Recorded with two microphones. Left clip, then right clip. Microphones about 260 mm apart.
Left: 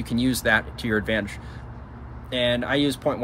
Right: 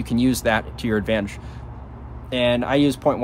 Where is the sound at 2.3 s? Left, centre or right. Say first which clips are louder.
Right 3 dB; centre.